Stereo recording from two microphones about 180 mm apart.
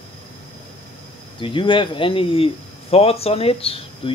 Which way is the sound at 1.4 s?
30° left (ahead or behind).